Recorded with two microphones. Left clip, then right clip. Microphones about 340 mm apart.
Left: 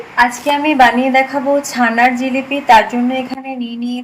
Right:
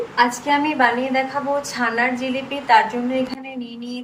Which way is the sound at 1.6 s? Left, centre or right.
Left.